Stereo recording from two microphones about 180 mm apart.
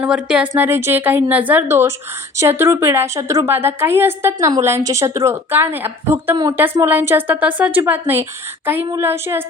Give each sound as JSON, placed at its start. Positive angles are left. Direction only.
{"t": 0.0, "sound": "a woman's voice", "side_deg": -5}